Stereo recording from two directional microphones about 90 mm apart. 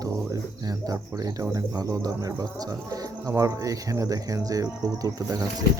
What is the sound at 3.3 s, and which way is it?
Speech, 35° right (ahead or behind).